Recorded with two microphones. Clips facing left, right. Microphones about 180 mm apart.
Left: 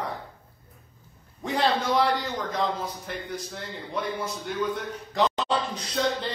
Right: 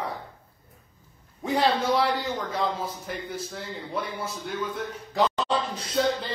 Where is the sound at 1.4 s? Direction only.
5° right (ahead or behind).